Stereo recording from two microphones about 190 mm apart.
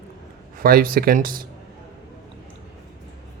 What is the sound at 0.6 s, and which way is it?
Speech, 50° right (ahead or behind).